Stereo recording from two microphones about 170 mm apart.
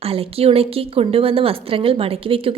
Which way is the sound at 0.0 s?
35° right (ahead or behind).